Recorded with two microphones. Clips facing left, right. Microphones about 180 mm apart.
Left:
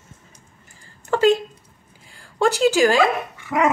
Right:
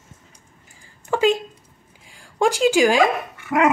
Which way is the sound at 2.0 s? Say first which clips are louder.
Even; 15° right (ahead or behind).